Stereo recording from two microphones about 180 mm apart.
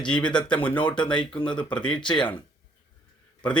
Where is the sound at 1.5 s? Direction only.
5° left (ahead or behind).